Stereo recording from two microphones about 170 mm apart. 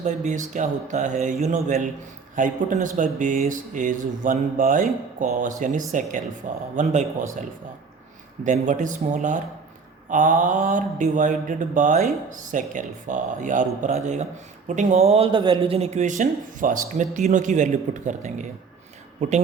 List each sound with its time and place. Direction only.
0.0 s speech: 45° right (ahead or behind)
8.4 s speech: 45° right (ahead or behind)